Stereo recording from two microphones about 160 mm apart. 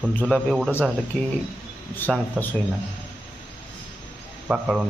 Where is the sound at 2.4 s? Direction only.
Centre (ahead or behind).